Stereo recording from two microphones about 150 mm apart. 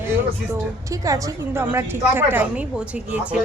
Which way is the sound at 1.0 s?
20° right (ahead or behind).